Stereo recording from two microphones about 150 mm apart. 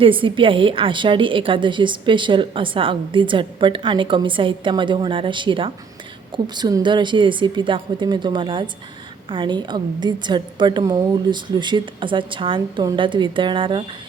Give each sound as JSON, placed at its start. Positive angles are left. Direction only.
{"t": 0.0, "sound": "a woman's voice", "side_deg": -35}